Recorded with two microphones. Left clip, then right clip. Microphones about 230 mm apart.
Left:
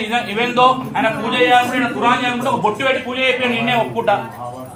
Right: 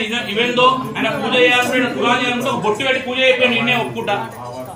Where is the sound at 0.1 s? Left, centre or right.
Left.